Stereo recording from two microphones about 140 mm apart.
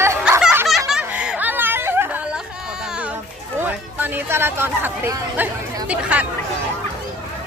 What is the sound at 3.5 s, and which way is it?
Speech, 15° right (ahead or behind).